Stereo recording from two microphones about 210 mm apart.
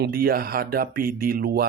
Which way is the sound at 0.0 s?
45° right (ahead or behind).